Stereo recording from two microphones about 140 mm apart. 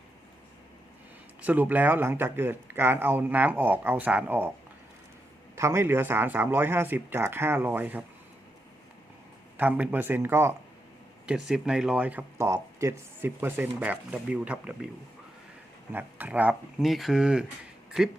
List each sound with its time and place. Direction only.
1.4 s speech: 10° right (ahead or behind)
5.5 s speech: 20° right (ahead or behind)
9.6 s speech: 10° right (ahead or behind)
11.3 s speech: 5° right (ahead or behind)
15.9 s speech: 15° right (ahead or behind)